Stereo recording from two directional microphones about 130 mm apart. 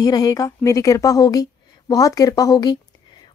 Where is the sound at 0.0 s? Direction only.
30° left (ahead or behind).